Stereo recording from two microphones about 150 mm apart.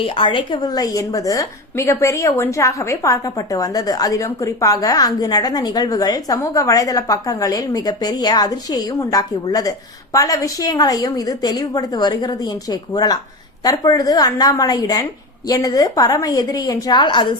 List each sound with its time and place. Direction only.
0.0 s a woman's voice: 35° left (ahead or behind)